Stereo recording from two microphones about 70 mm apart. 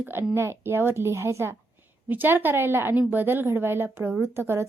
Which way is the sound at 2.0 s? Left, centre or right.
Right.